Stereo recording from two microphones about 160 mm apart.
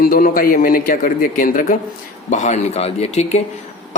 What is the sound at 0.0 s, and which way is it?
Speech, 65° left (ahead or behind).